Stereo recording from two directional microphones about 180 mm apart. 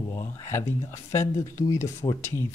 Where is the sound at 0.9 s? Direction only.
15° left (ahead or behind).